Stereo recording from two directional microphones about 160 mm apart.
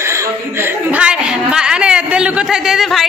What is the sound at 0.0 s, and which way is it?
A woman's voice, 15° right (ahead or behind).